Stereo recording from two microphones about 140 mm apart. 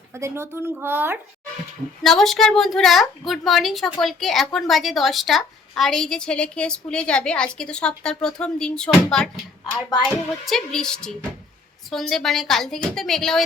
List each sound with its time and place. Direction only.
0.1 s speech: 20° right (ahead or behind)
2.0 s a woman's voice: centre (ahead or behind)
10.4 s a woman's voice: 5° left (ahead or behind)